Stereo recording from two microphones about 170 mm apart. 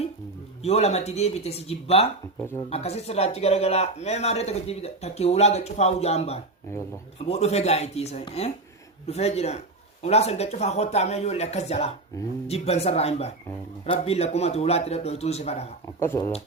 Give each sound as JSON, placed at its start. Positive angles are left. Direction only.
{"t": 0.6, "sound": "speech", "side_deg": 40}
{"t": 2.4, "sound": "speech", "side_deg": 15}
{"t": 2.6, "sound": "speech", "side_deg": 35}
{"t": 6.7, "sound": "speech", "side_deg": 15}
{"t": 7.2, "sound": "speech", "side_deg": 40}
{"t": 16.0, "sound": "speech", "side_deg": 15}